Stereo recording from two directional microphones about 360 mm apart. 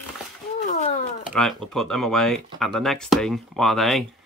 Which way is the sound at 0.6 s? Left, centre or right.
Left.